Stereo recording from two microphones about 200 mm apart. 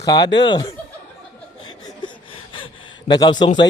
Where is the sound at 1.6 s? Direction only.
20° left (ahead or behind).